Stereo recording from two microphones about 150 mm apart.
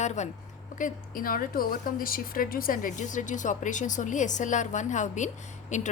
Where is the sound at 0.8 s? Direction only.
65° left (ahead or behind).